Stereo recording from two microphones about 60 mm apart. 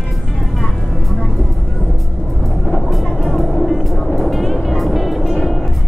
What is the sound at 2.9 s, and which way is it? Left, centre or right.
Music, centre.